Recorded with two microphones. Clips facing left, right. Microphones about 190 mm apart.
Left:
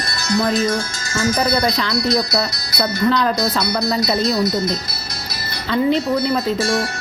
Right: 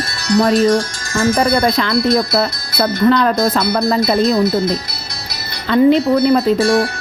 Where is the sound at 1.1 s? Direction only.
55° right (ahead or behind).